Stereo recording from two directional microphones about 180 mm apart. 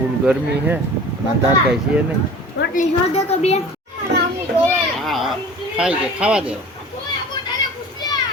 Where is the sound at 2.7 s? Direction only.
35° left (ahead or behind).